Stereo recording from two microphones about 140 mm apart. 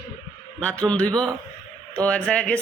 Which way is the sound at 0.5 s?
10° left (ahead or behind).